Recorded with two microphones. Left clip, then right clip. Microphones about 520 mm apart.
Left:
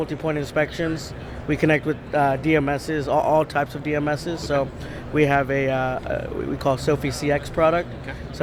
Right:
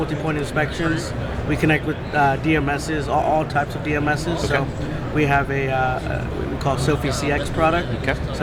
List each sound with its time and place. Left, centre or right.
0.3 s speech: left